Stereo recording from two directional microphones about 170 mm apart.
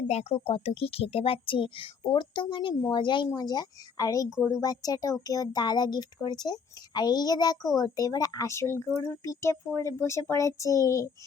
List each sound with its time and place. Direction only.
0.1 s a woman's voice: 40° left (ahead or behind); by 11.1 s 20° left (ahead or behind)